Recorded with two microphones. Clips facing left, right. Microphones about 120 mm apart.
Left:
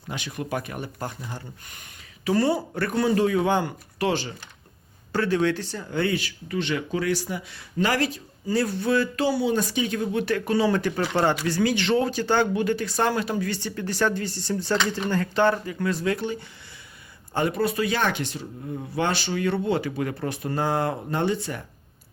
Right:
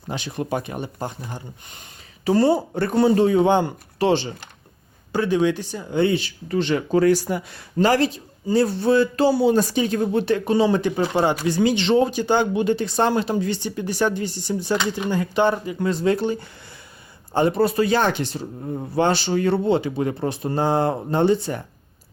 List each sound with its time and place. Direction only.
0.1 s speech: 30° right (ahead or behind)
5.1 s speech: 15° right (ahead or behind); by 7.6 s 45° right (ahead or behind)
7.8 s speech: 30° right (ahead or behind)